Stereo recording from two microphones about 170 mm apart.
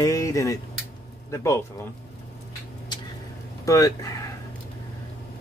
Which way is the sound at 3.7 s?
20° left (ahead or behind).